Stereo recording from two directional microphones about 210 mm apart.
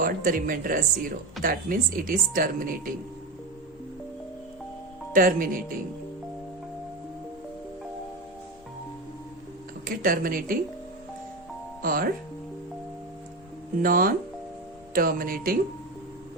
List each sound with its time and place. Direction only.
0.0 s speech: 40° right (ahead or behind)
5.1 s speech: 40° right (ahead or behind)
9.8 s speech: 40° right (ahead or behind)
11.8 s speech: 40° right (ahead or behind)
13.8 s speech: 40° right (ahead or behind)